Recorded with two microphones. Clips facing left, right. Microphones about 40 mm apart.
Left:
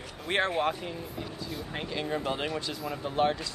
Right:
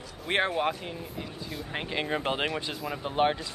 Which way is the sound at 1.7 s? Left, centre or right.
Right.